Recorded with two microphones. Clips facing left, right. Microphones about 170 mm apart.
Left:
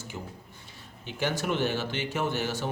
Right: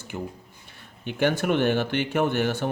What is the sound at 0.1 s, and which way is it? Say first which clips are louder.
Speech: right 6 dB; 55° right (ahead or behind).